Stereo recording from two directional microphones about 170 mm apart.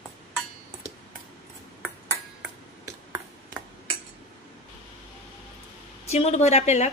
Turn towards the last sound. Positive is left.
turn(degrees=40)  # may be behind; listen again after turning